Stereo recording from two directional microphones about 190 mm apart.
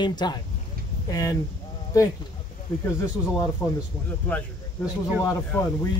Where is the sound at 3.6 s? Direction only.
15° left (ahead or behind).